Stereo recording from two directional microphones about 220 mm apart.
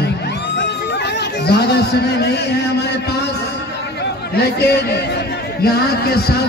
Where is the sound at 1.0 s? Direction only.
50° left (ahead or behind).